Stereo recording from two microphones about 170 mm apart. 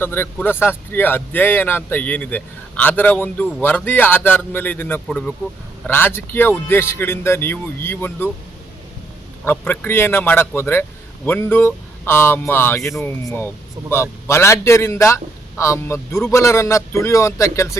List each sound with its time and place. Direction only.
0.0 s speech: 10° left (ahead or behind)
9.4 s speech: 10° left (ahead or behind)
12.8 s speech: centre (ahead or behind)
13.1 s speech: 10° left (ahead or behind)